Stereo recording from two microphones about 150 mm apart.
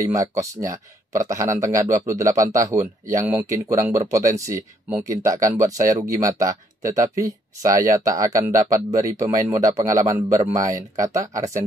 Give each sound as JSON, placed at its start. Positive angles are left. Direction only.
{"t": 0.1, "sound": "speech", "side_deg": -20}